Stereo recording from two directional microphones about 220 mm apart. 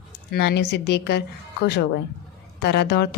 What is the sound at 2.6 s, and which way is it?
Speech, 45° left (ahead or behind).